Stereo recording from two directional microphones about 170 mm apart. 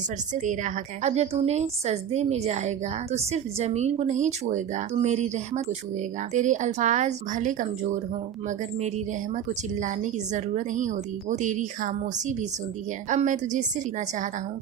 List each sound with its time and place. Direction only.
0.3 s a woman's voice: 45° right (ahead or behind)
9.3 s speech: 45° right (ahead or behind)
13.1 s speech: 45° right (ahead or behind)